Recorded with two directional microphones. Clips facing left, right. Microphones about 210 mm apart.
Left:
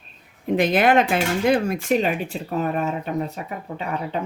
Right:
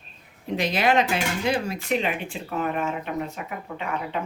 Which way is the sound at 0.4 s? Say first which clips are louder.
Left 5 dB; 55° left (ahead or behind).